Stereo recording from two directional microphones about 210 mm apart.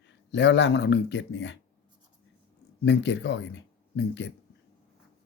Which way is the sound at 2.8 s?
55° left (ahead or behind).